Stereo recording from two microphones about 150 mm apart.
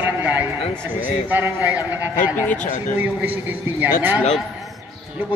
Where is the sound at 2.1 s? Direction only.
60° left (ahead or behind).